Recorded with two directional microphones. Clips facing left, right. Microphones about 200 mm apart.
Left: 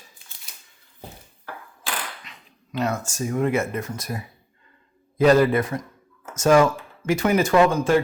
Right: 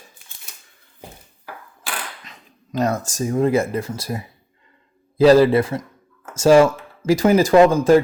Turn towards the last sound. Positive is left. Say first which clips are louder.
# right 6 dB
turn(degrees=-35)  # may be behind; listen again after turning